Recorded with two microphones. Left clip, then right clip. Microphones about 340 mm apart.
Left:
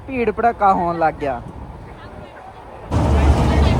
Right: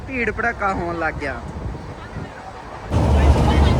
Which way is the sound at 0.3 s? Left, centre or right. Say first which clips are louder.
Left 10 dB; left.